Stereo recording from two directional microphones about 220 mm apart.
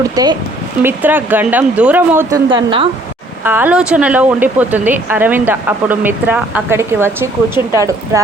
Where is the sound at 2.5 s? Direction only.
25° right (ahead or behind).